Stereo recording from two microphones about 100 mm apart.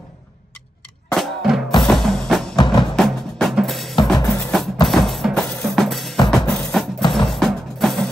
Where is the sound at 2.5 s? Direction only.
50° left (ahead or behind).